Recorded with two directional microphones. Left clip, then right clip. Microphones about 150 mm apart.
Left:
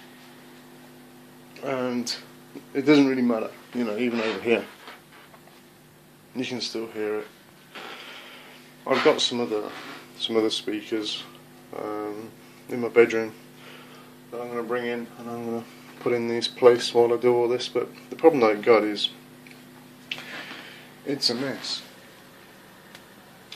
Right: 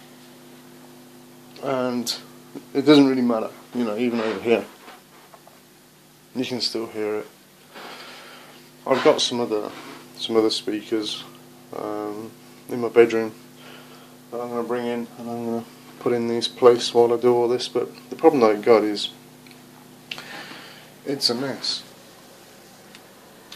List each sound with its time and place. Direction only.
1.6 s speech: 15° right (ahead or behind)
6.3 s speech: 15° right (ahead or behind)
8.8 s speech: 15° right (ahead or behind)
14.4 s speech: 20° right (ahead or behind)
21.1 s speech: 10° right (ahead or behind)